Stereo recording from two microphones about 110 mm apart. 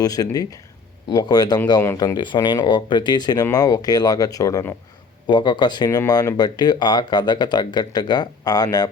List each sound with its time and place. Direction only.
0.0 s speech: 35° left (ahead or behind)
5.2 s speech: 45° left (ahead or behind)